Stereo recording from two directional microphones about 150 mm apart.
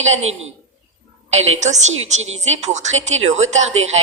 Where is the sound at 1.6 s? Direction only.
50° right (ahead or behind).